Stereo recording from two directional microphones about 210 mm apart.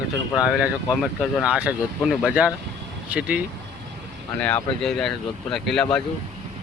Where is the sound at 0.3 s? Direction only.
5° right (ahead or behind).